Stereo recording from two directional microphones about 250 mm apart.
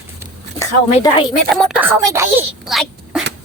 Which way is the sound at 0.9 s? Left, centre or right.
Left.